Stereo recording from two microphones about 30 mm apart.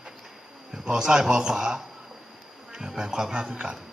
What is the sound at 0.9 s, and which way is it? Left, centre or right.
A man's voice, right.